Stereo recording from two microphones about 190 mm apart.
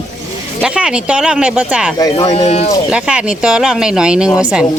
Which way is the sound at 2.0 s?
20° left (ahead or behind).